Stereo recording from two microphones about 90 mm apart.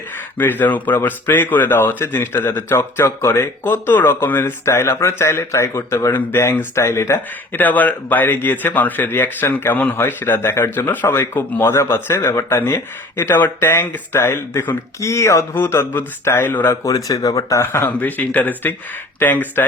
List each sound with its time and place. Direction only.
0.3 s speech: 20° left (ahead or behind)
7.6 s speech: 20° left (ahead or behind)
15.0 s speech: 35° left (ahead or behind)
16.8 s speech: 45° left (ahead or behind); by 19.6 s 20° left (ahead or behind)